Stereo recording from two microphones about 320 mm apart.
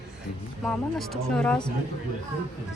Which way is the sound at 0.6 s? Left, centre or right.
Centre.